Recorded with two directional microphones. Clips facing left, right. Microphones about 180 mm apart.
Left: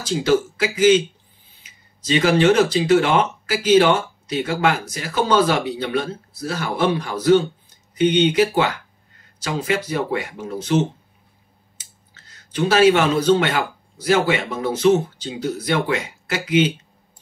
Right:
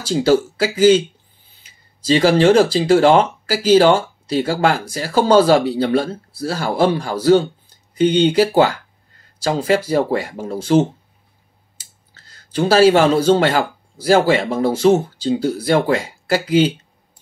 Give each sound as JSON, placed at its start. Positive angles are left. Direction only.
{"t": 0.1, "sound": "speech", "side_deg": -30}
{"t": 2.0, "sound": "speech", "side_deg": -30}
{"t": 12.1, "sound": "speech", "side_deg": -30}